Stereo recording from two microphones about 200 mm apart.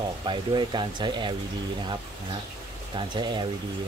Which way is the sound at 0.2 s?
25° right (ahead or behind).